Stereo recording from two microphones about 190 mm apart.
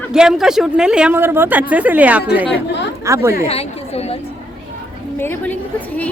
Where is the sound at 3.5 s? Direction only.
30° left (ahead or behind).